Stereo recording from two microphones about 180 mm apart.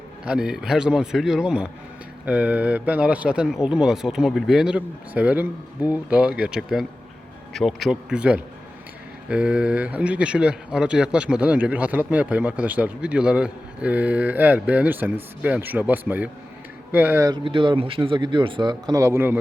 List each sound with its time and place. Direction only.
0.3 s a man's voice: 5° right (ahead or behind)